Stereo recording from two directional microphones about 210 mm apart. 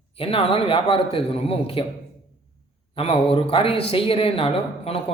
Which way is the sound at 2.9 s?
25° left (ahead or behind).